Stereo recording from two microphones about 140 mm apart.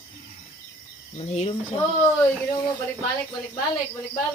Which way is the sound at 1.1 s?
45° left (ahead or behind).